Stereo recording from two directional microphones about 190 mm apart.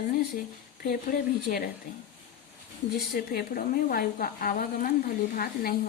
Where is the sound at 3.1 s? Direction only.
50° left (ahead or behind).